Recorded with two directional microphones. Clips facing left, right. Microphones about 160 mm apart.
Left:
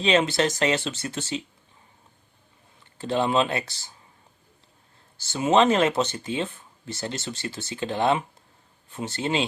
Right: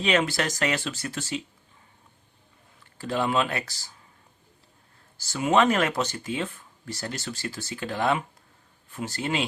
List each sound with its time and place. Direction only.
0.0 s speech: 25° left (ahead or behind)
3.0 s speech: 25° left (ahead or behind)
5.1 s speech: 25° left (ahead or behind)